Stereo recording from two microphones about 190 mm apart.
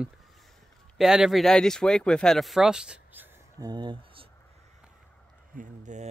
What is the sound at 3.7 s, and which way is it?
Speech, 25° right (ahead or behind).